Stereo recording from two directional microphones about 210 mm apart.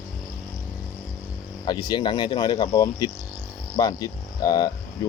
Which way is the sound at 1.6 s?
20° left (ahead or behind).